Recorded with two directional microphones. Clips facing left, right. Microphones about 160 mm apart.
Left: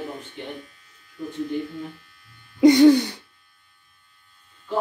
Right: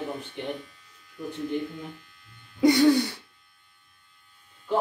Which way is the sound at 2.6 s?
20° left (ahead or behind).